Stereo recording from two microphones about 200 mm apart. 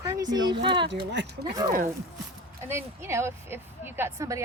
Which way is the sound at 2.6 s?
15° right (ahead or behind).